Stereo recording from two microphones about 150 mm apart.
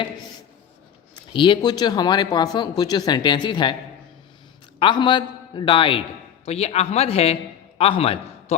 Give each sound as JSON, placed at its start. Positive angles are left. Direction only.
{"t": 1.1, "sound": "speech", "side_deg": 30}
{"t": 4.8, "sound": "a man's voice", "side_deg": 30}